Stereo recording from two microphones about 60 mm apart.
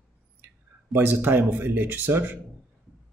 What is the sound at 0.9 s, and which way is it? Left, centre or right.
Speech, right.